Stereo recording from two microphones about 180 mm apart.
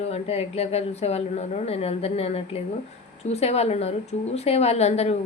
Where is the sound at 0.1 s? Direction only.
35° left (ahead or behind).